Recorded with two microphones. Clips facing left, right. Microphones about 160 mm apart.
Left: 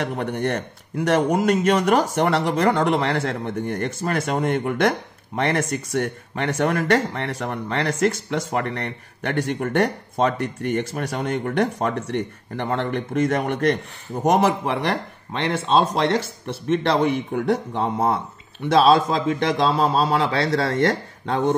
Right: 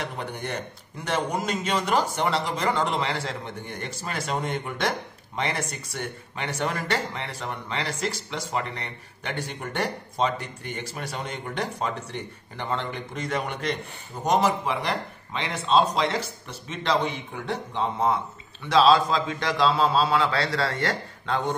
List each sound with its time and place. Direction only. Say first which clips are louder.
0.0 s a man's voice: left 8 dB; 65° left (ahead or behind); by 20.2 s 45° left (ahead or behind)